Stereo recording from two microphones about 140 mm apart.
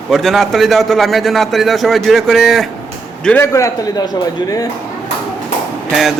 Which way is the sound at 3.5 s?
20° left (ahead or behind).